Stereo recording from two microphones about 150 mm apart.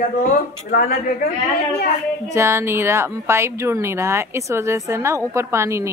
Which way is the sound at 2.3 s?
15° right (ahead or behind).